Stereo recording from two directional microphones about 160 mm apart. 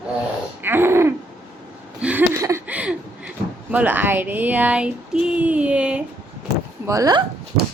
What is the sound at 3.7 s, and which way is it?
Speech, 10° right (ahead or behind).